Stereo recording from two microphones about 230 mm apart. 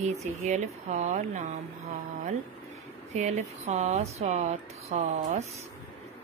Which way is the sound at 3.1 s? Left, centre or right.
Right.